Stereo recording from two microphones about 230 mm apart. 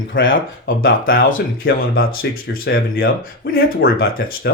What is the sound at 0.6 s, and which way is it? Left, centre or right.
Speech, left.